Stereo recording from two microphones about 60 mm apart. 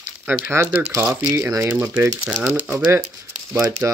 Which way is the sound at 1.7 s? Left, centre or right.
Right.